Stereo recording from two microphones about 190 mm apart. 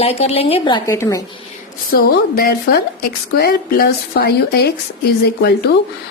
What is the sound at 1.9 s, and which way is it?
A woman's voice, 50° left (ahead or behind).